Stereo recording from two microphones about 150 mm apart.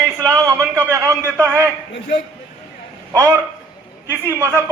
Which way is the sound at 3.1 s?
20° right (ahead or behind).